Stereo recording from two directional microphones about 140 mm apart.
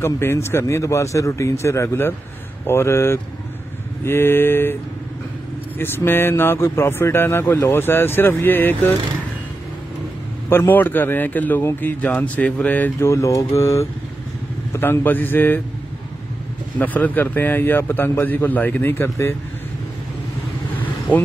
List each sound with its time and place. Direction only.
0.0 s speech: 20° left (ahead or behind)
5.8 s speech: 15° left (ahead or behind)
10.5 s speech: 15° left (ahead or behind)
16.7 s speech: 10° left (ahead or behind)